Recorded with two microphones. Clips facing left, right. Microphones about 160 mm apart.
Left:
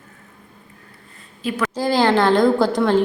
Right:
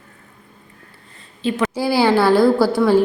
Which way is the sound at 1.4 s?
25° right (ahead or behind).